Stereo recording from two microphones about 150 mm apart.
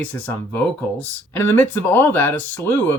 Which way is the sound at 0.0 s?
15° left (ahead or behind).